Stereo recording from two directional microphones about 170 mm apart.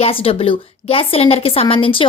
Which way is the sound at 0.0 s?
35° left (ahead or behind).